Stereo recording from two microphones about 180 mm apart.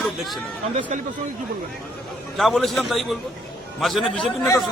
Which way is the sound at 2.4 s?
Centre (ahead or behind).